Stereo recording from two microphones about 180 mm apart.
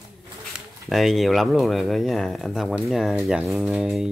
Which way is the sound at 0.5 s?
Centre (ahead or behind).